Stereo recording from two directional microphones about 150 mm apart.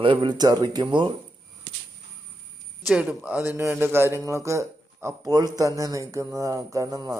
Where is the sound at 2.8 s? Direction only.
5° right (ahead or behind).